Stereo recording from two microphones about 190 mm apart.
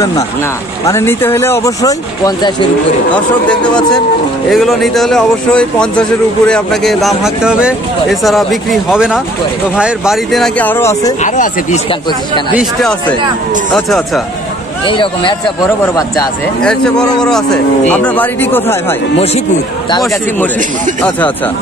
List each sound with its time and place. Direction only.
0.8 s speech: 15° left (ahead or behind)
3.4 s speech: 5° left (ahead or behind)
11.2 s speech: 40° left (ahead or behind)
13.8 s speech: centre (ahead or behind)
14.9 s speech: 25° left (ahead or behind)
16.6 s speech: 5° left (ahead or behind)
19.1 s speech: 35° left (ahead or behind)